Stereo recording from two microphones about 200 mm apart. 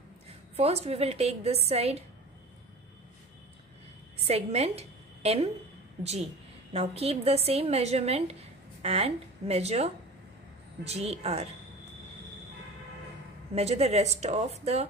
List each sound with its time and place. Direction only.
0.6 s a woman's voice: 30° right (ahead or behind)
4.2 s a woman's voice: 30° right (ahead or behind)
6.7 s a woman's voice: 30° right (ahead or behind)
13.6 s a woman's voice: 30° right (ahead or behind)